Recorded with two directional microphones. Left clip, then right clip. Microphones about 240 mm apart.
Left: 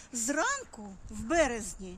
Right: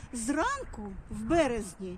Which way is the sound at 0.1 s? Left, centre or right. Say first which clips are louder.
Even; left.